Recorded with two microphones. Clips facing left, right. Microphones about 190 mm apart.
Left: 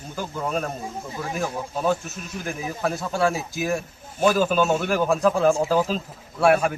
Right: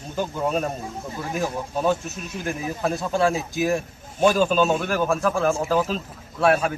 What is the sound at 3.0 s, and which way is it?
Speech, 15° right (ahead or behind).